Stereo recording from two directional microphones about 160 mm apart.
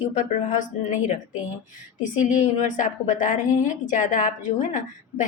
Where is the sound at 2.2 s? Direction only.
50° left (ahead or behind).